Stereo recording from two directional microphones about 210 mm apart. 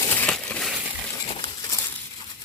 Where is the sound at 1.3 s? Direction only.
25° left (ahead or behind).